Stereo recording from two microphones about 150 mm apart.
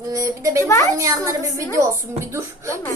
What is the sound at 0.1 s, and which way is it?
Speech, 20° right (ahead or behind).